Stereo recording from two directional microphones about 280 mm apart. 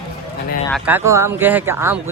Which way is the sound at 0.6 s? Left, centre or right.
Centre.